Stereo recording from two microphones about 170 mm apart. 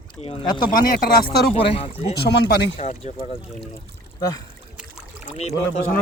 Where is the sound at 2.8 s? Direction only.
40° left (ahead or behind).